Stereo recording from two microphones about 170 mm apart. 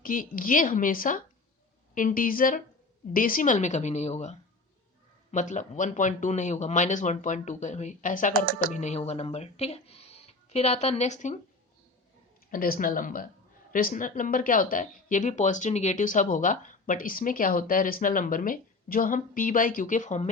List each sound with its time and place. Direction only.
0.0 s speech: 55° left (ahead or behind)
12.5 s speech: 60° left (ahead or behind)